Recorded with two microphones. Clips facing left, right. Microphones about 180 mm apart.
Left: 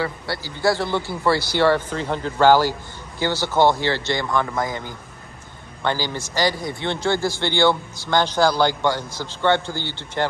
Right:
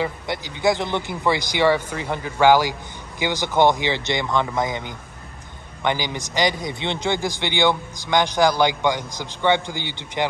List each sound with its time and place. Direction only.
0.0 s a man's voice: 20° right (ahead or behind)